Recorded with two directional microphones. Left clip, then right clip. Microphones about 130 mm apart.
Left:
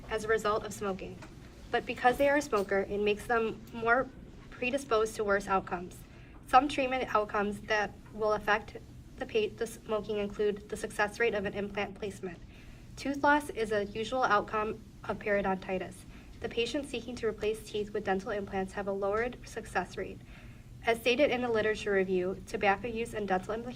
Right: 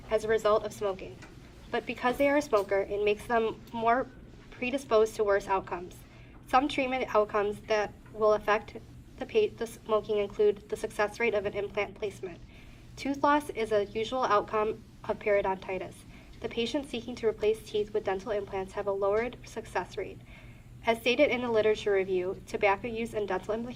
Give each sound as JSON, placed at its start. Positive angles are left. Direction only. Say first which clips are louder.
{"t": 0.1, "sound": "a woman's voice", "louder": "right 4 dB", "side_deg": -15}